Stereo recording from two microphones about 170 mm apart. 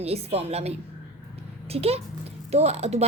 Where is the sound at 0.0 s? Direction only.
35° right (ahead or behind).